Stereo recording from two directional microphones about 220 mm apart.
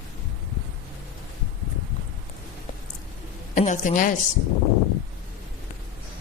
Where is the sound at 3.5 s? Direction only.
35° left (ahead or behind).